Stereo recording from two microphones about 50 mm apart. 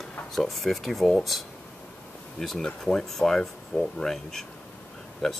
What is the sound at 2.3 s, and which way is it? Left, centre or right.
Speech, centre.